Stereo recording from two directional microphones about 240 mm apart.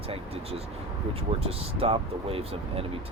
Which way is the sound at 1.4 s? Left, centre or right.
Right.